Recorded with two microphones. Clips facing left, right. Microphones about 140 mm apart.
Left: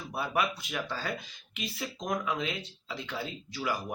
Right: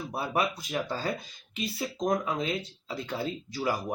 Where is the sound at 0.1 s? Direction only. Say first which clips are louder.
Right 1 dB; 35° right (ahead or behind).